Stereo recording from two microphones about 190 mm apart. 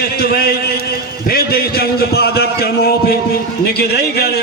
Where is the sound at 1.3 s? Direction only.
55° left (ahead or behind).